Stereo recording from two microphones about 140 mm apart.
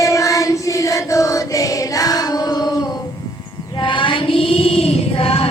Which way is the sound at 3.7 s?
35° left (ahead or behind).